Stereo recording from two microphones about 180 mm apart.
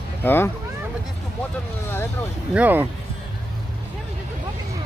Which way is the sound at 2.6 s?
10° right (ahead or behind).